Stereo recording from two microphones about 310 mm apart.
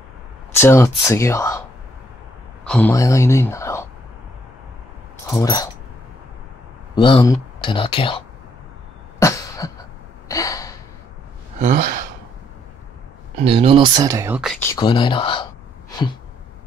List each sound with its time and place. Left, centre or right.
0.6 s speech: centre
2.6 s speech: centre
5.2 s speech: centre
7.0 s speech: centre
9.2 s cough: centre
13.4 s speech: centre
14.6 s speech: centre